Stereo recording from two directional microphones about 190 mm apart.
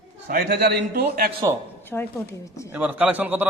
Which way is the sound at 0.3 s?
55° right (ahead or behind).